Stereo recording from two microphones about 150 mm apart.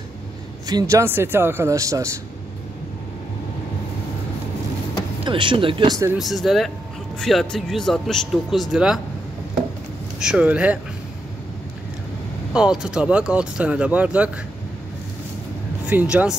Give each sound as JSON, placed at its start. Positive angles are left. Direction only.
{"t": 0.7, "sound": "a man's voice", "side_deg": -25}
{"t": 5.2, "sound": "speech", "side_deg": -35}
{"t": 6.1, "sound": "speech", "side_deg": 0}
{"t": 10.1, "sound": "speech", "side_deg": -5}
{"t": 12.5, "sound": "speech", "side_deg": -5}
{"t": 15.9, "sound": "speech", "side_deg": -10}